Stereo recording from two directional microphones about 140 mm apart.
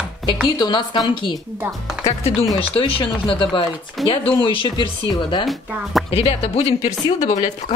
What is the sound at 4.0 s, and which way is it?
Speech, centre (ahead or behind).